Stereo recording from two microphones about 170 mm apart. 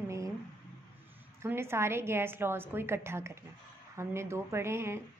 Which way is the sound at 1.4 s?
15° right (ahead or behind).